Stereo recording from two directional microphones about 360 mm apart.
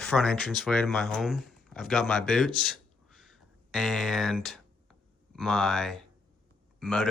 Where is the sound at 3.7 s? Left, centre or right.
Centre.